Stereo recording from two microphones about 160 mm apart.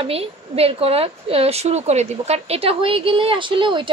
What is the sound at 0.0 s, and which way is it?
Speech, 40° right (ahead or behind).